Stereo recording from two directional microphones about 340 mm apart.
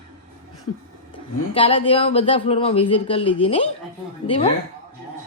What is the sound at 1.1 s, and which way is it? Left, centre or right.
A man's voice, centre.